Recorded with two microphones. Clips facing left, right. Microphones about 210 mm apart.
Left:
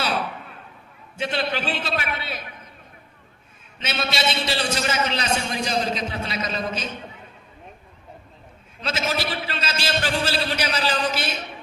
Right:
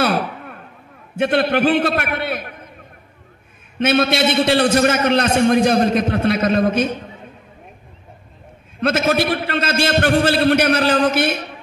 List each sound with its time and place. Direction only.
0.0 s a sound: 55° right (ahead or behind)
1.1 s a man's voice: 55° right (ahead or behind)
3.7 s a man's voice: 55° right (ahead or behind)
8.8 s a man's voice: 55° right (ahead or behind)